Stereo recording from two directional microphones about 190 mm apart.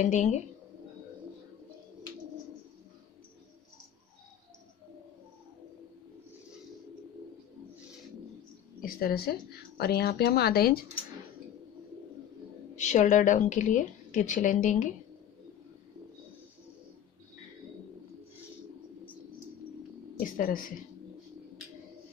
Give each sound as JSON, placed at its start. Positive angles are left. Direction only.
{"t": 0.0, "sound": "a woman's voice", "side_deg": 40}
{"t": 8.8, "sound": "speech", "side_deg": 55}
{"t": 12.7, "sound": "a woman's voice", "side_deg": 40}
{"t": 20.2, "sound": "a woman's voice", "side_deg": 45}